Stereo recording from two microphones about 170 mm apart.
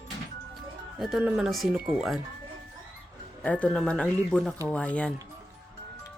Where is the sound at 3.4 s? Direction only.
10° left (ahead or behind).